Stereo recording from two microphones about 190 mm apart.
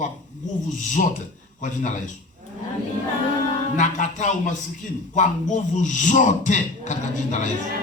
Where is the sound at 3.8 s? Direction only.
40° left (ahead or behind).